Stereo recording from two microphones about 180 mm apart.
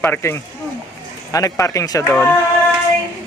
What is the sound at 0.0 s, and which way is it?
Speech, 15° left (ahead or behind).